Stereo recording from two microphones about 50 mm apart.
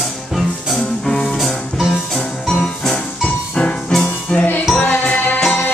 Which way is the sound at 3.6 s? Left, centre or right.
Left.